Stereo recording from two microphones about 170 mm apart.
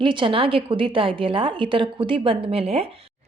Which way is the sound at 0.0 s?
30° right (ahead or behind).